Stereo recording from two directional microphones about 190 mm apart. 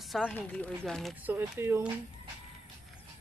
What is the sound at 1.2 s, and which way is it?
Speech, 10° right (ahead or behind).